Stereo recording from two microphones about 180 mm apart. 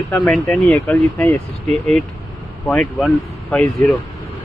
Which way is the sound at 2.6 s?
5° left (ahead or behind).